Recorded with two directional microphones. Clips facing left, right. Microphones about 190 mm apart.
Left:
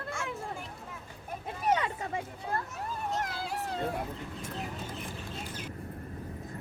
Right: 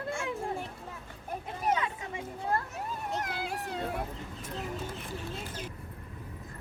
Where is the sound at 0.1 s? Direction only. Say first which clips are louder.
Right 4 dB; 30° right (ahead or behind).